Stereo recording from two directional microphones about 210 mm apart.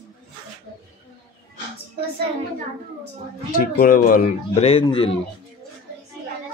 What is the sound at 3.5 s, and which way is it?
Speech, 40° left (ahead or behind).